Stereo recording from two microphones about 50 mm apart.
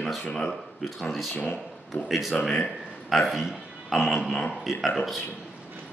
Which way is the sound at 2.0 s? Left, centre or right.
Centre.